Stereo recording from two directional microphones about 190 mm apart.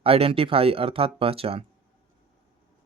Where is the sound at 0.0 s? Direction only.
30° right (ahead or behind).